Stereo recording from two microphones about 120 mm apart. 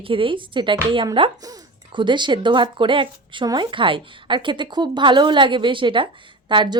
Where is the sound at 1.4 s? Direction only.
30° right (ahead or behind).